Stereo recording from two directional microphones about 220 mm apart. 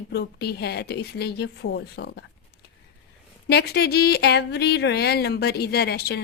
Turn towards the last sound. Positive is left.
turn(degrees=45)  # may be behind; listen again after turning